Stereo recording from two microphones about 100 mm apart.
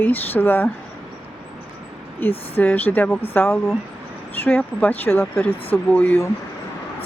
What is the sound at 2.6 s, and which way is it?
Speech, 20° left (ahead or behind).